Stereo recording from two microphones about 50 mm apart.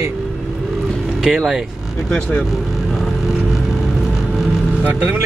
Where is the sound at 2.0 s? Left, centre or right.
Centre.